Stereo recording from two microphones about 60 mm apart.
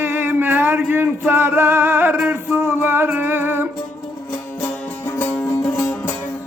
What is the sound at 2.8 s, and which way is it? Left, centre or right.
Music, right.